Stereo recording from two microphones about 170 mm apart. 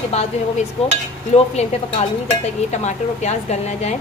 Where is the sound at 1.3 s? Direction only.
35° left (ahead or behind).